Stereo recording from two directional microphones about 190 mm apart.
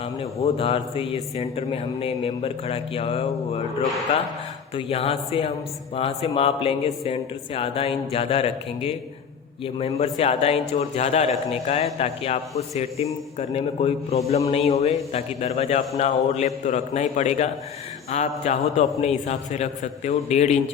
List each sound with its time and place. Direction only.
0.0 s a man's voice: 30° left (ahead or behind)
4.7 s a man's voice: 30° left (ahead or behind)